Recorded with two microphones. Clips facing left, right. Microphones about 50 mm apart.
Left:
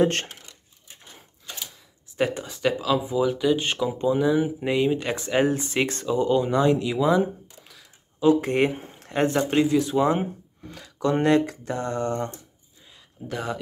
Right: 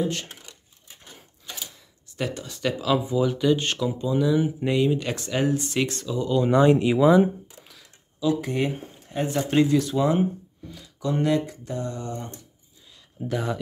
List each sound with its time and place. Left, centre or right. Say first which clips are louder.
2.1 s speech: left 5 dB; left
2.5 s speech: left 1 dB; centre
4.0 s speech: left 1 dB; left
6.4 s speech: right 3 dB; centre
6.7 s speech: right 4 dB; right
7.0 s speech: right 4 dB; centre
8.2 s speech: left 5 dB; left
9.0 s a sound: left 5 dB; left
9.5 s speech: right 1 dB; centre
10.7 s speech: left 4 dB; left
13.3 s speech: right 2 dB; centre